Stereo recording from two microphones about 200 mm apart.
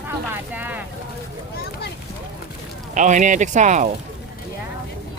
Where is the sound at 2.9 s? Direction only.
40° right (ahead or behind).